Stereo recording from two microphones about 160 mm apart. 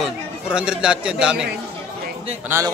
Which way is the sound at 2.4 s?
15° right (ahead or behind).